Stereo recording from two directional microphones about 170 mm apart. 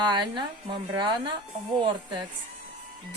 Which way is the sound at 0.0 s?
25° right (ahead or behind).